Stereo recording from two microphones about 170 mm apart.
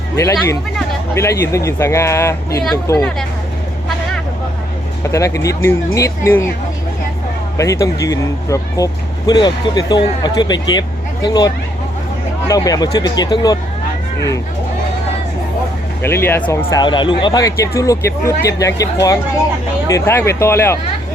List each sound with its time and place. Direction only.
1.1 s speech: 15° left (ahead or behind)
5.0 s speech: 15° left (ahead or behind)
7.5 s speech: 20° left (ahead or behind)
16.0 s speech: 15° left (ahead or behind)